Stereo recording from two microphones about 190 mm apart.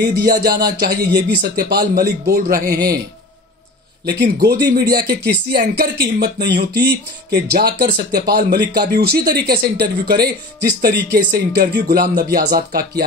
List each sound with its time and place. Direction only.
0.1 s speech: 50° right (ahead or behind)
4.0 s speech: 60° right (ahead or behind)